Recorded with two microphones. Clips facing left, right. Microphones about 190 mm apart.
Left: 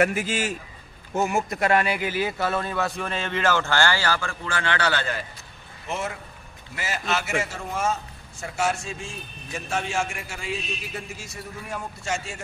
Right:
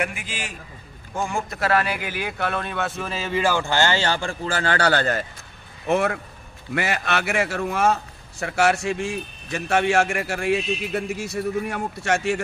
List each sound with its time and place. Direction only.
0.0 s a man's voice: 40° left (ahead or behind)
1.1 s a man's voice: 20° left (ahead or behind)
2.2 s speech: 5° left (ahead or behind); by 5.2 s 45° right (ahead or behind)
5.9 s a man's voice: 60° right (ahead or behind)